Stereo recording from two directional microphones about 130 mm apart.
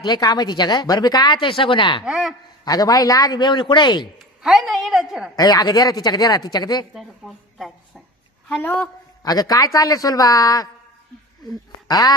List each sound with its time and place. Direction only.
0.0 s speech: 30° left (ahead or behind)
2.0 s a woman's voice: 5° right (ahead or behind)
2.6 s speech: 30° left (ahead or behind)
4.4 s a woman's voice: centre (ahead or behind)
5.3 s speech: 30° left (ahead or behind)
6.9 s a woman's voice: centre (ahead or behind)
9.2 s a man's voice: 30° left (ahead or behind)
11.9 s a man's voice: 25° left (ahead or behind)